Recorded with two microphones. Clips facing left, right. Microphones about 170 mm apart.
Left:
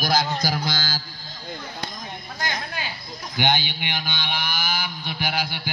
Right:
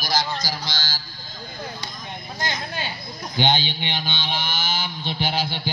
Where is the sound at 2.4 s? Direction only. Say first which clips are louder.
Right 1 dB; 30° right (ahead or behind).